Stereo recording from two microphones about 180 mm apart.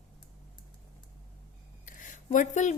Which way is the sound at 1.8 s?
45° left (ahead or behind).